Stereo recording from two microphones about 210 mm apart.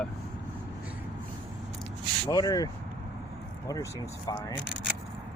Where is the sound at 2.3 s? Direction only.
15° left (ahead or behind).